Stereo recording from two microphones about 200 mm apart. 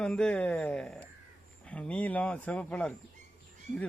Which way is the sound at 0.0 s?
5° left (ahead or behind).